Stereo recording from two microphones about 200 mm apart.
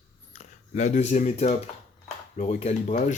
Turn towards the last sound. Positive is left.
turn(degrees=35)  # may be behind; listen again after turning